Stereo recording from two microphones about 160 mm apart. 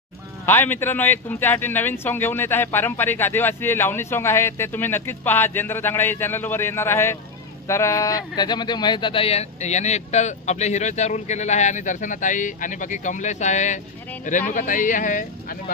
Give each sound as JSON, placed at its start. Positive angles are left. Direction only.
{"t": 0.4, "sound": "speech", "side_deg": 15}